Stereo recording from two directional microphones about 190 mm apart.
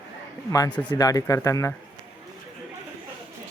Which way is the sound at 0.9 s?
20° left (ahead or behind).